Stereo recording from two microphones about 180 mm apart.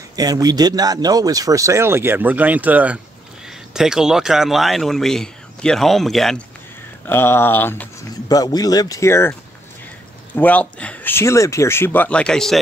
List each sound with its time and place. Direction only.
0.1 s speech: 20° right (ahead or behind); by 6.4 s centre (ahead or behind)
7.1 s speech: 15° left (ahead or behind)
8.3 s speech: 20° left (ahead or behind)
10.3 s speech: 10° left (ahead or behind)